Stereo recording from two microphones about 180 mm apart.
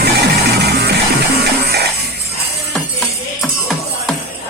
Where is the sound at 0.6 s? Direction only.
65° right (ahead or behind).